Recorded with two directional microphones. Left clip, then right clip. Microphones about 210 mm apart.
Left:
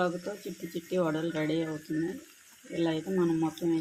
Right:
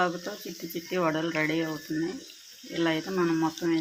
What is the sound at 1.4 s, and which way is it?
Speech, centre (ahead or behind).